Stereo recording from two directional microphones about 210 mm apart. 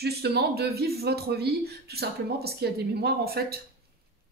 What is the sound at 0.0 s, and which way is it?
Speech, 50° right (ahead or behind).